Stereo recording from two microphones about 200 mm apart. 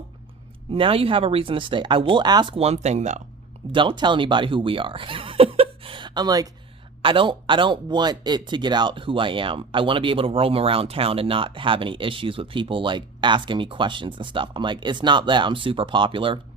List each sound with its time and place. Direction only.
0.7 s speech: 25° right (ahead or behind)
3.7 s speech: 25° right (ahead or behind)